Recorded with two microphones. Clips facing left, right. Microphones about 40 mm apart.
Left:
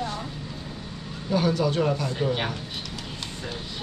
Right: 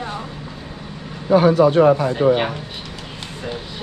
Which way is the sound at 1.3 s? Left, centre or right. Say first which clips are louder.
Right 11 dB; right.